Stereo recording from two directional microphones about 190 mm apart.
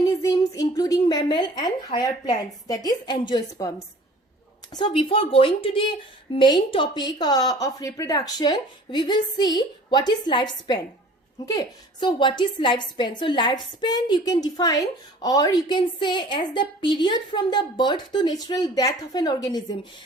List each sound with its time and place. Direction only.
0.0 s a woman's voice: 15° left (ahead or behind)